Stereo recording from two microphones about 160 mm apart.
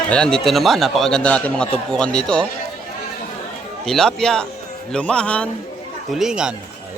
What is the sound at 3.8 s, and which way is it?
A man's voice, 5° left (ahead or behind).